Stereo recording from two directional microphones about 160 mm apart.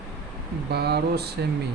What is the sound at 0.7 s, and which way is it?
Speech, 90° right.